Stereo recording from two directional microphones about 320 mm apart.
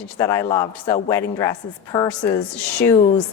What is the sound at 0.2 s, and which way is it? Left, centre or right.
A woman's voice, centre.